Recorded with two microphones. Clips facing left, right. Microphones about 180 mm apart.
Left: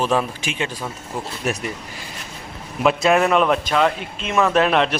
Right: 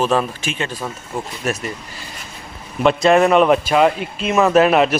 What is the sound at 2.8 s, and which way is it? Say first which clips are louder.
Speech: right 3 dB; 5° left (ahead or behind).